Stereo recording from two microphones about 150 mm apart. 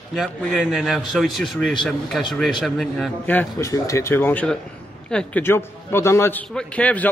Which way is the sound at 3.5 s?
20° left (ahead or behind).